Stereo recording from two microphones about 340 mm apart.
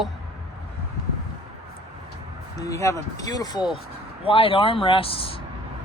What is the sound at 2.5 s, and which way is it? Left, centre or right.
Speech, centre.